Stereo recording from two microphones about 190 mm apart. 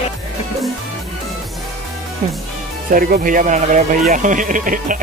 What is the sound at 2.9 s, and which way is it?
Speech, 45° right (ahead or behind).